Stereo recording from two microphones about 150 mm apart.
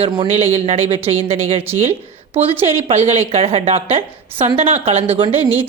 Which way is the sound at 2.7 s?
40° right (ahead or behind).